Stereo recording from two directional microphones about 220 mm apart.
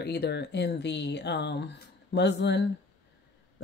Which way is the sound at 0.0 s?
45° left (ahead or behind).